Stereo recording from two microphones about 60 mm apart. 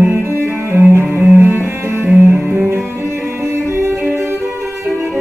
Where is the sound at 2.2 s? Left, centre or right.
Right.